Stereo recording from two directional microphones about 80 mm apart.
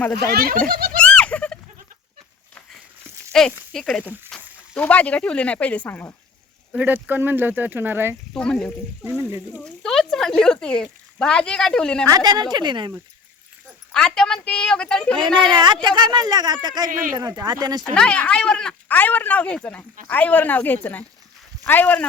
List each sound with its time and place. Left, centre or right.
0.6 s a sound: centre
3.3 s a woman's voice: centre
4.3 s a sound: centre
4.8 s a woman's voice: centre
6.7 s speech: right
8.3 s a woman's voice: centre
12.0 s speech: right
13.9 s a woman's voice: centre
15.4 s speech: right
17.9 s speech: centre